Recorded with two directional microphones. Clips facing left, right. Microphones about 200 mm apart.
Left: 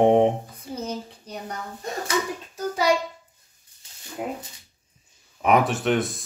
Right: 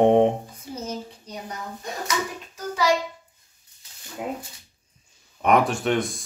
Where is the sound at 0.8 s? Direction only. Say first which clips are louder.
Left 1 dB; 55° left (ahead or behind).